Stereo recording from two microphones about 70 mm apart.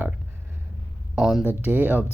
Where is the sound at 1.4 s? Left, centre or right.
Right.